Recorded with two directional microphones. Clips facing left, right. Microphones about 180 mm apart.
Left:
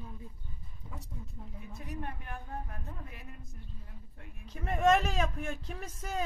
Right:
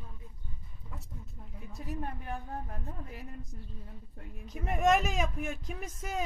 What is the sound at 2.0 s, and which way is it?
Speech, 30° right (ahead or behind).